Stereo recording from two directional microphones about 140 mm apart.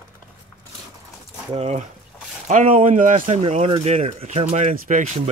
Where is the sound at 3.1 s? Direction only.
40° right (ahead or behind).